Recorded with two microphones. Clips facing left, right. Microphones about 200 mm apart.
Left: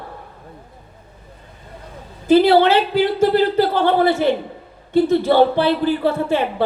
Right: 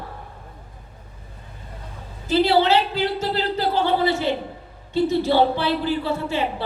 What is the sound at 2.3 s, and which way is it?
A man's voice, 55° left (ahead or behind).